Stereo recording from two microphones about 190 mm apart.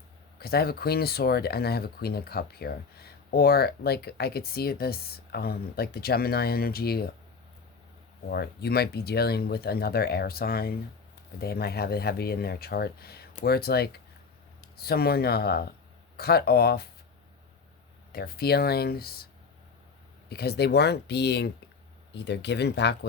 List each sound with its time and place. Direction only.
0.3 s speech: 55° left (ahead or behind)
8.3 s speech: 55° left (ahead or behind)
18.1 s speech: 55° left (ahead or behind)
20.3 s speech: 55° left (ahead or behind)